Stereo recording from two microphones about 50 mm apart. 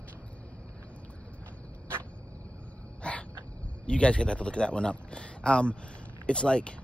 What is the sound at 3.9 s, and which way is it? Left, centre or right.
Speech, left.